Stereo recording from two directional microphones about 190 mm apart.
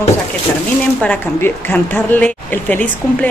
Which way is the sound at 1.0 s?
10° left (ahead or behind).